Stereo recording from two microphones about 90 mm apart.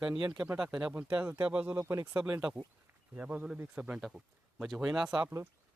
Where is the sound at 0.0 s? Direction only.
10° right (ahead or behind).